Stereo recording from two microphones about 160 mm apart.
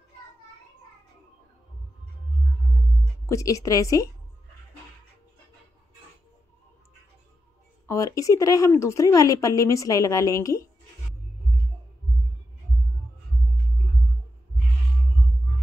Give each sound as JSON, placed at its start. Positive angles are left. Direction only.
{"t": 3.3, "sound": "a woman's voice", "side_deg": 20}
{"t": 7.8, "sound": "a woman's voice", "side_deg": 20}